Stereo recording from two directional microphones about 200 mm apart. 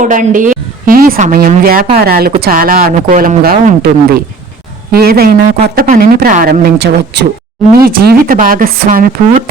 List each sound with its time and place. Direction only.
0.0 s a woman's voice: 40° right (ahead or behind)